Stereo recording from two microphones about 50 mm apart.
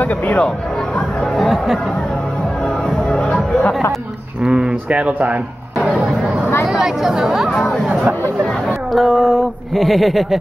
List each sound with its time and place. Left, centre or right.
0.0 s speech: left
1.4 s chatter: centre
3.0 s music: centre
4.4 s speech: centre
4.8 s a sound: right
6.6 s speech: centre